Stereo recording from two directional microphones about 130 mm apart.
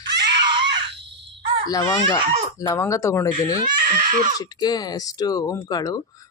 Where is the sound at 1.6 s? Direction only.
30° left (ahead or behind).